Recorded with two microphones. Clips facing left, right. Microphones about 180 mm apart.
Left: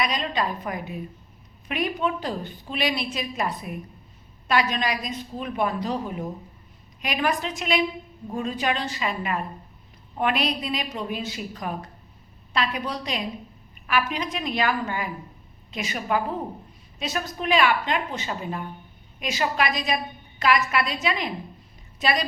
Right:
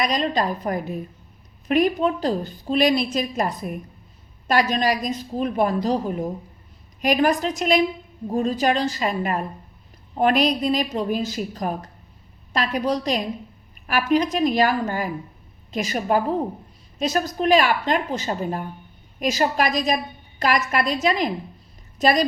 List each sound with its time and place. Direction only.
0.0 s a woman's voice: 40° right (ahead or behind)